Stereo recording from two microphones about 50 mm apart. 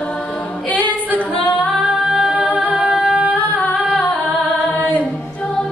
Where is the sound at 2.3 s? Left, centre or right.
Right.